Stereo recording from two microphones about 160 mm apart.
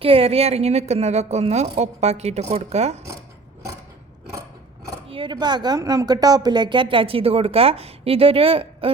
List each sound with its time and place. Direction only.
0.0 s a woman's voice: 35° right (ahead or behind)
5.0 s speech: 35° right (ahead or behind)